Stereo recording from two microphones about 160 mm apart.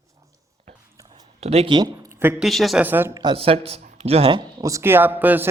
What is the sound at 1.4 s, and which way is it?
Speech, 40° right (ahead or behind).